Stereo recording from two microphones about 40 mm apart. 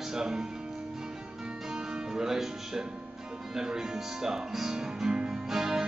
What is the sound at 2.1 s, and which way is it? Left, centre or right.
Speech, centre.